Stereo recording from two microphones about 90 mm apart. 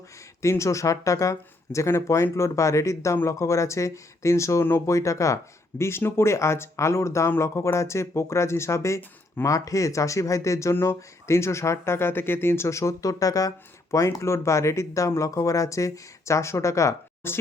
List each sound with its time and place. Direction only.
0.4 s speech: 35° left (ahead or behind)